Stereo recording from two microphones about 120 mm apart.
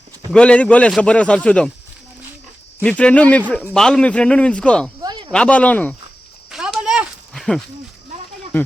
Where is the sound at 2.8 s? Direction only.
10° left (ahead or behind).